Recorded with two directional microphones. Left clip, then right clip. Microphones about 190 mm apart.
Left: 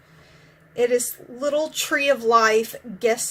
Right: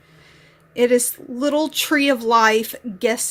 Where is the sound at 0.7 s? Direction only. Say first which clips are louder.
Right 4 dB; 50° right (ahead or behind).